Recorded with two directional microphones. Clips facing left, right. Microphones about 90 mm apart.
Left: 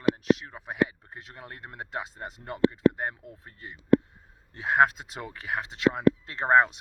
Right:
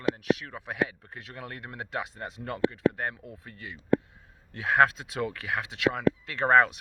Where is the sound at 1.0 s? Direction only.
25° left (ahead or behind).